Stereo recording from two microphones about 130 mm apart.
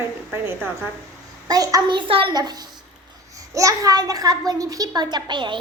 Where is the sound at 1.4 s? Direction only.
30° right (ahead or behind).